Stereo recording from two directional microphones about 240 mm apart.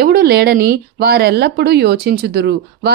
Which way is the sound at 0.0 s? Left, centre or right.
Right.